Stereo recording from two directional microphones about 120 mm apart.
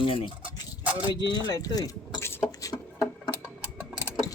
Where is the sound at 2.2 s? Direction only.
20° left (ahead or behind).